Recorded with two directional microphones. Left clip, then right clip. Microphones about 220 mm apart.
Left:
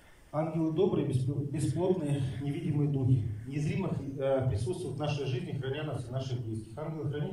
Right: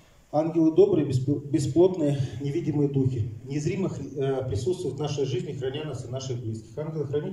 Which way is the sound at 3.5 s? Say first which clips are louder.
Right 7 dB; 25° right (ahead or behind).